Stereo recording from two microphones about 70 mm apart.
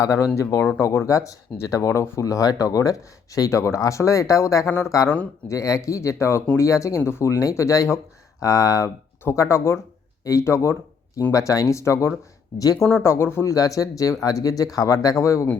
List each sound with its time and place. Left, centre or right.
0.0 s speech: left
9.3 s speech: left
11.2 s speech: left
13.5 s speech: left